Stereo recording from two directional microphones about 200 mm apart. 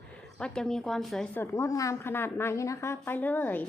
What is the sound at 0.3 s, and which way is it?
Speech, 5° left (ahead or behind).